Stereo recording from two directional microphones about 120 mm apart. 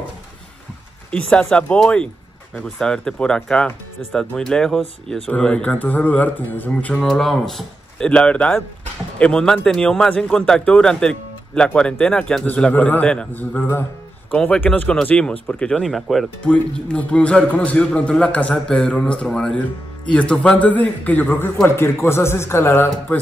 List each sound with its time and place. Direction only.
1.1 s speech: 10° left (ahead or behind)
7.0 s speech: centre (ahead or behind); by 23.1 s 20° left (ahead or behind)